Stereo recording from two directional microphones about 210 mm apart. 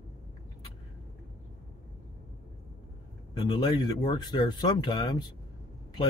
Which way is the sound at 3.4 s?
20° left (ahead or behind).